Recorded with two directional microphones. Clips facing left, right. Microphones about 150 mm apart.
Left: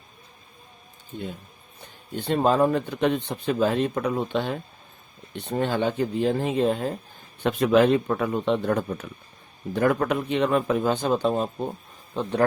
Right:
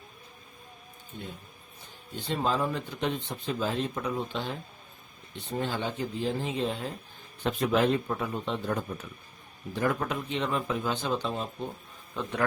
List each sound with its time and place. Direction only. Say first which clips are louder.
1.8 s speech: left 7 dB; 60° left (ahead or behind)
7.4 s a man's voice: left 7 dB; 75° left (ahead or behind); by 11.4 s 45° left (ahead or behind)
12.1 s speech: left 7 dB; 30° left (ahead or behind)